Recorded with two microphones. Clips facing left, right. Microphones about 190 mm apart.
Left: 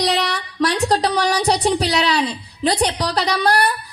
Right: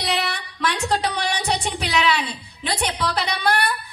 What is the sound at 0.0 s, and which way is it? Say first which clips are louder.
Speech: left 5 dB; 40° left (ahead or behind).